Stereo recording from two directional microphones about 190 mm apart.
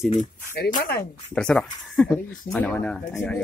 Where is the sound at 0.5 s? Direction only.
55° left (ahead or behind).